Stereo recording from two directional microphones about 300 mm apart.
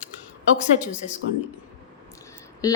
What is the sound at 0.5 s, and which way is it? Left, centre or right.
Speech, left.